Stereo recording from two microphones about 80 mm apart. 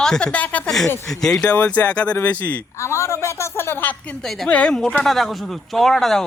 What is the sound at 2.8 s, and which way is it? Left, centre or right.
A woman's voice, left.